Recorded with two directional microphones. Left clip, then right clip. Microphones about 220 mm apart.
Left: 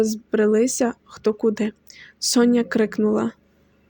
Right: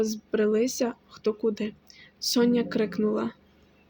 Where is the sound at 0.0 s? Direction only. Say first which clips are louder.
Left 6 dB; 35° left (ahead or behind).